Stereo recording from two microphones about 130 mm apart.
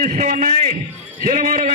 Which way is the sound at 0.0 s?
85° right.